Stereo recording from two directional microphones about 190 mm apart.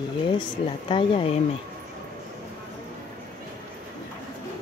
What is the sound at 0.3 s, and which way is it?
Speech, 25° left (ahead or behind).